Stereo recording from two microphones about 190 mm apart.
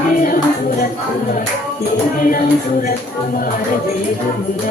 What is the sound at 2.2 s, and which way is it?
Music, 45° left (ahead or behind).